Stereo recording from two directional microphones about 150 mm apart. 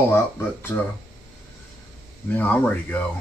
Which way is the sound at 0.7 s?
20° left (ahead or behind).